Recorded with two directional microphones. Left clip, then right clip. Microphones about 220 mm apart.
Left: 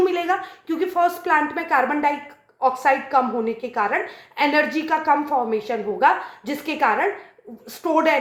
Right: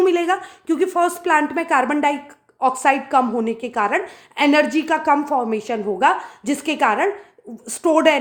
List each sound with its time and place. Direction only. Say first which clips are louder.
0.0 s a woman's voice: right 3 dB; 55° right (ahead or behind)